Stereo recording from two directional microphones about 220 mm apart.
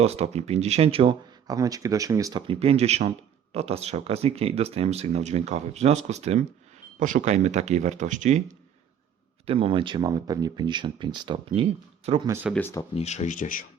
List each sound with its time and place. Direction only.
0.0 s speech: 30° right (ahead or behind)
9.5 s speech: 25° right (ahead or behind)
12.3 s speech: 10° right (ahead or behind)
12.9 s speech: 30° left (ahead or behind)